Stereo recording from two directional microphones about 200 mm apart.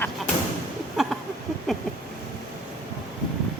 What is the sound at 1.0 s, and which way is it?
Speech, centre (ahead or behind).